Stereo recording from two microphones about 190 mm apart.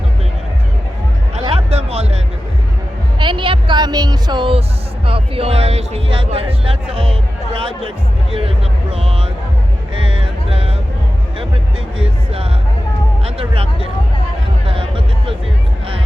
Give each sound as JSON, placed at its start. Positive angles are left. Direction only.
{"t": 1.5, "sound": "music", "side_deg": -35}
{"t": 3.2, "sound": "speech", "side_deg": -25}
{"t": 5.0, "sound": "music", "side_deg": -30}
{"t": 13.2, "sound": "speech", "side_deg": -30}
{"t": 14.7, "sound": "music", "side_deg": -30}